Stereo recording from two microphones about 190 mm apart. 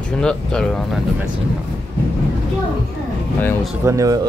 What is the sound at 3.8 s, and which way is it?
Speech, 15° right (ahead or behind).